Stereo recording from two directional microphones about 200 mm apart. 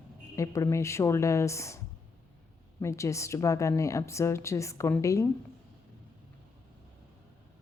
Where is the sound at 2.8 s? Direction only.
15° left (ahead or behind).